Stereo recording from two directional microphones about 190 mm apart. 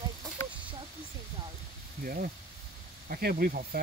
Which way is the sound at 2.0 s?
50° right (ahead or behind).